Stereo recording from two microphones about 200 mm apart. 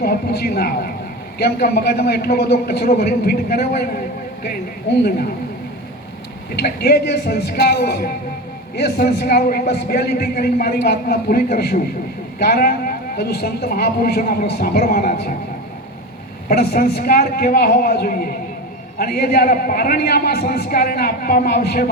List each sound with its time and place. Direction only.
0.0 s a man's voice: 50° left (ahead or behind)
6.6 s a man's voice: 55° left (ahead or behind)
16.5 s a man's voice: 50° left (ahead or behind)